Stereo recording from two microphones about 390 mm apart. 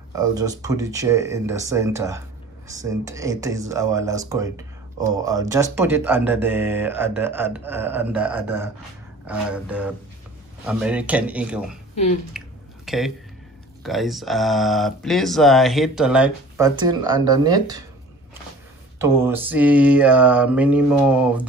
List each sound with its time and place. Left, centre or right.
0.1 s speech: centre
12.3 s drip: centre
13.8 s speech: centre
18.9 s speech: centre